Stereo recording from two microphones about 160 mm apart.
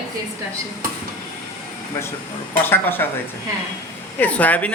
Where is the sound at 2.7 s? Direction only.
15° left (ahead or behind).